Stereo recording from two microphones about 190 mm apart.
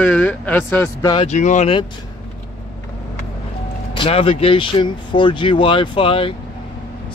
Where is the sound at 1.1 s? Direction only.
35° left (ahead or behind).